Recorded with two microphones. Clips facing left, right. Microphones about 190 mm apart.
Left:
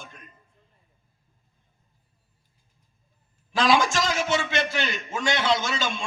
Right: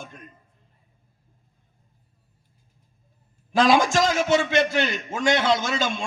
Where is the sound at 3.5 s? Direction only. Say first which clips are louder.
Right 3 dB; 50° right (ahead or behind).